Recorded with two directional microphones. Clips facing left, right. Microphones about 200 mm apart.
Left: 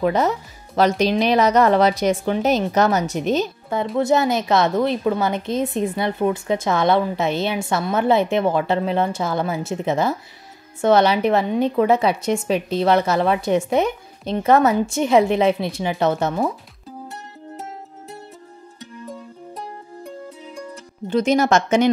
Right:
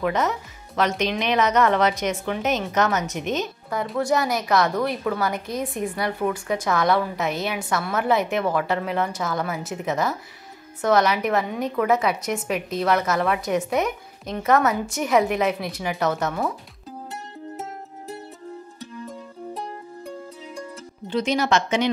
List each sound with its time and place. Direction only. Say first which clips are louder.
0.0 s a woman's voice: left 4 dB; 35° left (ahead or behind)
21.1 s speech: left 5 dB; 45° left (ahead or behind)